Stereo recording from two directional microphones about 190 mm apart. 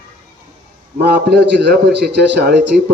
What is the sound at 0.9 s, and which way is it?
A man's voice, 60° right (ahead or behind).